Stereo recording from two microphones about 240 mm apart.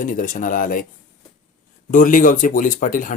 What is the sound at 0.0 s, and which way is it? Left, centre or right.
Speech, left.